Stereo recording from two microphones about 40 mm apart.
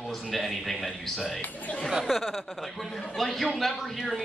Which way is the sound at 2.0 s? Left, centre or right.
Centre.